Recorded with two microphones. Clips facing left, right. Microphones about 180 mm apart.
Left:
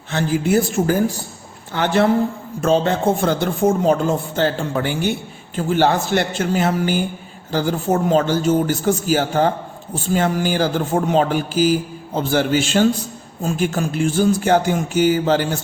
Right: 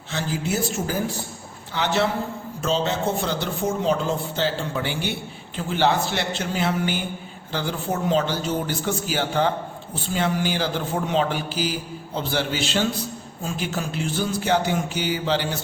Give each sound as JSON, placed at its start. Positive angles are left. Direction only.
{"t": 0.1, "sound": "a woman's voice", "side_deg": 55}